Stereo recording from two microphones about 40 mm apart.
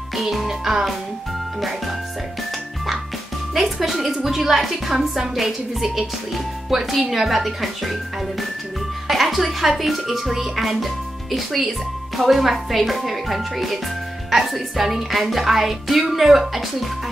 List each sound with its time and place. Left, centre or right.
0.1 s a woman's voice: centre
3.5 s a woman's voice: centre